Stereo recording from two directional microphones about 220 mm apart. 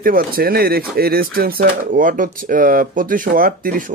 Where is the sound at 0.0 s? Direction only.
40° right (ahead or behind).